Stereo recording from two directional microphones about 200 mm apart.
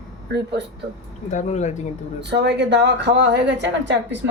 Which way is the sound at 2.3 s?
60° right (ahead or behind).